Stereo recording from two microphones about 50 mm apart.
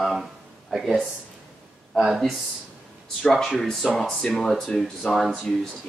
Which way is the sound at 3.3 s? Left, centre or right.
Centre.